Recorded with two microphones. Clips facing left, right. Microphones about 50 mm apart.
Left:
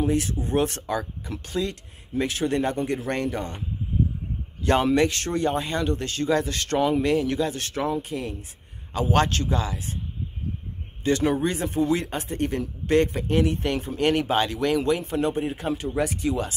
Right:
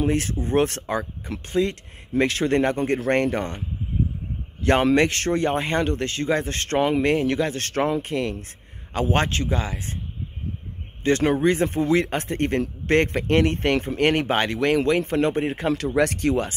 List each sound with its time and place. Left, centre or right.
0.0 s speech: right
2.1 s a man's voice: right
9.1 s speech: right
11.1 s a man's voice: right
15.9 s speech: right